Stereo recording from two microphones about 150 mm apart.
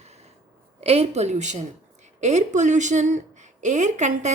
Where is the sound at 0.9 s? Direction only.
45° right (ahead or behind).